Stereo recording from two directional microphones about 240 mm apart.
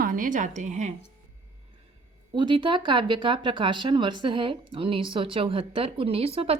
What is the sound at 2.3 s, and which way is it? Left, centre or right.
Speech, centre.